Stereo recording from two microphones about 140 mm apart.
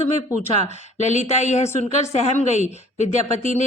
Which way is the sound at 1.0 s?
55° left (ahead or behind).